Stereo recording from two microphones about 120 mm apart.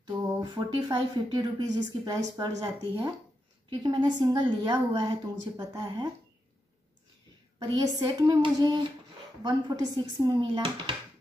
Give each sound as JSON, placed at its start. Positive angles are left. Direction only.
{"t": 0.4, "sound": "speech", "side_deg": -35}
{"t": 7.5, "sound": "speech", "side_deg": -35}